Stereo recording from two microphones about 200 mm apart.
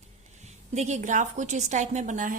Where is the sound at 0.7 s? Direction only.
35° right (ahead or behind).